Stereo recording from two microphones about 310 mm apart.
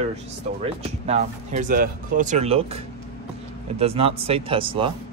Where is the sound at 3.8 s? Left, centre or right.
Centre.